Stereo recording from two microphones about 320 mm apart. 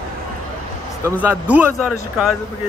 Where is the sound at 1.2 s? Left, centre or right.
Centre.